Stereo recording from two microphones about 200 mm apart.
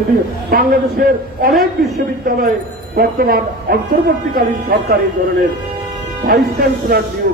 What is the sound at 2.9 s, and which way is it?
Speech, 50° right (ahead or behind).